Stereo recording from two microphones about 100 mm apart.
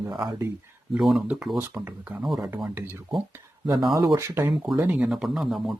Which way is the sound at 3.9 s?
35° right (ahead or behind).